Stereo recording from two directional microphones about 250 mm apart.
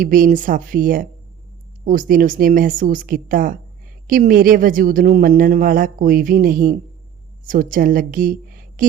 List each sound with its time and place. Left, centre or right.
0.0 s a woman's voice: right